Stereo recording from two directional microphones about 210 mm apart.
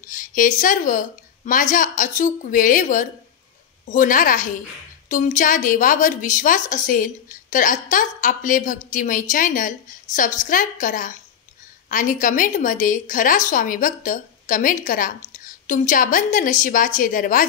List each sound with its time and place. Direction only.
0.1 s a woman's voice: 40° left (ahead or behind)